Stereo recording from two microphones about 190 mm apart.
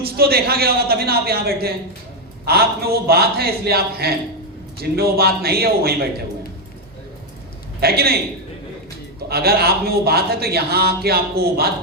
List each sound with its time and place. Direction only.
0.0 s a man's voice: 55° right (ahead or behind)
7.8 s a man's voice: 55° right (ahead or behind)
9.3 s a man's voice: 55° right (ahead or behind)